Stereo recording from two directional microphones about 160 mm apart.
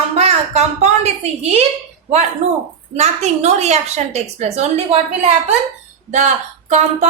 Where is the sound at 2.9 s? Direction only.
45° right (ahead or behind).